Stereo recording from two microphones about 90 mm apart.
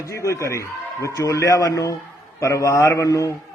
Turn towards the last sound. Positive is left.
turn(degrees=35)  # may be behind; listen again after turning